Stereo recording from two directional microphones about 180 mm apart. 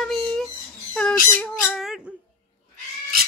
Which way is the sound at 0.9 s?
10° left (ahead or behind).